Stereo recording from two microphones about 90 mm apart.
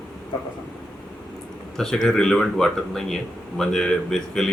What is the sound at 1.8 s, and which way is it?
A man's voice, 5° left (ahead or behind).